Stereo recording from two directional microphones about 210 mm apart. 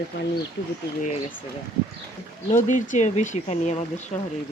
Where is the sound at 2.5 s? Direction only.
35° left (ahead or behind).